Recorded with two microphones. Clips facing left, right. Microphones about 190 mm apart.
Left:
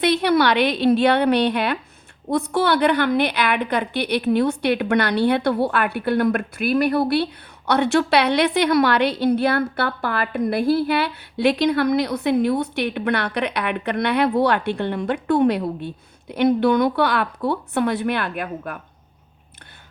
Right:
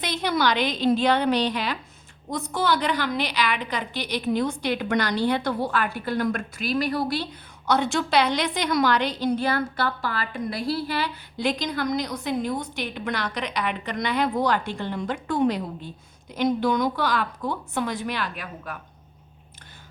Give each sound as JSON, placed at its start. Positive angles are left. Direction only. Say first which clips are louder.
{"t": 0.0, "sound": "a woman's voice", "louder": "left 7 dB", "side_deg": 65}